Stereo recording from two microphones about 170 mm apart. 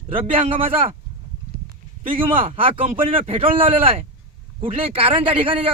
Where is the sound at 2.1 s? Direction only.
35° right (ahead or behind).